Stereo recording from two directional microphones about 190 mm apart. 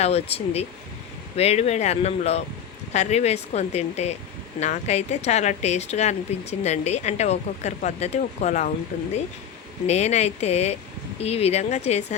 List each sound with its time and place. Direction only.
0.0 s speech: 30° left (ahead or behind)
9.8 s speech: 35° left (ahead or behind)